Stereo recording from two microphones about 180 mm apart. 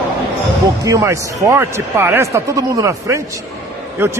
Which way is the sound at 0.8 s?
15° right (ahead or behind).